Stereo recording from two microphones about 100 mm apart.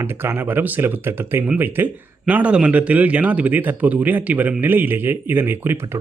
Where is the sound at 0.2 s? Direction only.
20° right (ahead or behind).